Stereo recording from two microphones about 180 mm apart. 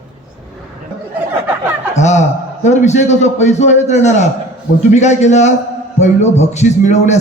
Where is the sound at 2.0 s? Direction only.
40° left (ahead or behind).